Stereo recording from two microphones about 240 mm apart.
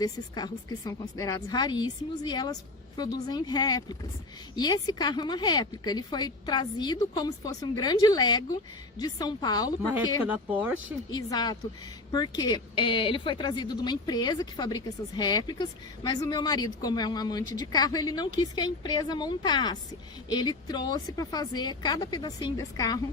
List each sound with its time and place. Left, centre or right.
0.0 s a woman's voice: centre
10.2 s speech: centre
11.1 s a woman's voice: centre